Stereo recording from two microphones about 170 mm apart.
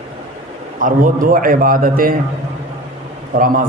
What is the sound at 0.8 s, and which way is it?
A man's voice, 50° right (ahead or behind).